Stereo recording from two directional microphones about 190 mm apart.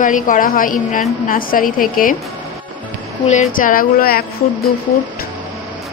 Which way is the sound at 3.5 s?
45° left (ahead or behind).